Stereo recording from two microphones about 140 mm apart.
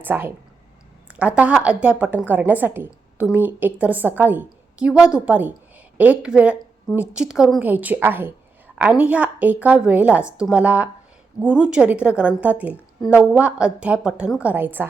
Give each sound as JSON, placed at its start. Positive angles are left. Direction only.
{"t": 0.0, "sound": "a woman's voice", "side_deg": -15}
{"t": 1.4, "sound": "a woman's voice", "side_deg": -10}